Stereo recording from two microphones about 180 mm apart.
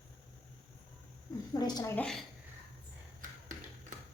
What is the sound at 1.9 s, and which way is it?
Speech, 5° left (ahead or behind).